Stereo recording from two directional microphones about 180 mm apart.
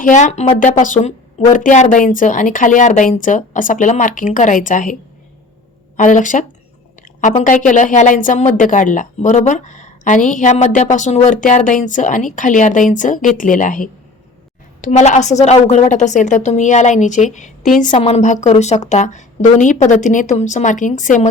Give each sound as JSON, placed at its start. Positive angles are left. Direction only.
{"t": 0.0, "sound": "a woman's voice", "side_deg": 40}
{"t": 6.0, "sound": "a woman's voice", "side_deg": 45}